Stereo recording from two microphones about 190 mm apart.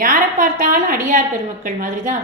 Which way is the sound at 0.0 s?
45° right (ahead or behind).